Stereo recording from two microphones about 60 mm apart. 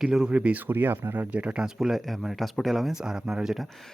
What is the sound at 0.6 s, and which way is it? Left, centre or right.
Speech, right.